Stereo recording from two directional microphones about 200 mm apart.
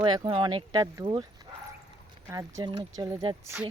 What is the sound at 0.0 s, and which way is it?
Speech, 25° right (ahead or behind).